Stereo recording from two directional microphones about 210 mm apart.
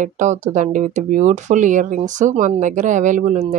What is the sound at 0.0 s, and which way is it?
Speech, 35° right (ahead or behind).